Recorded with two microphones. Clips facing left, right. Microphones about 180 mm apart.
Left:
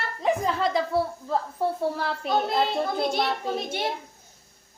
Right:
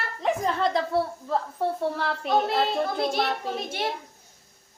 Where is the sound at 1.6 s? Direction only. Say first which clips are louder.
Even; 5° left (ahead or behind).